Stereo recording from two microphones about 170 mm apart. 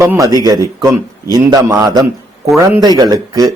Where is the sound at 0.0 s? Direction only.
15° right (ahead or behind).